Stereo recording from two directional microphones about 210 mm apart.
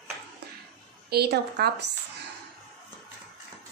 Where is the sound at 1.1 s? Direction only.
50° right (ahead or behind).